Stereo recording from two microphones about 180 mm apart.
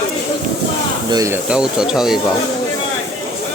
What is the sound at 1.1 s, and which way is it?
Speech, 15° right (ahead or behind).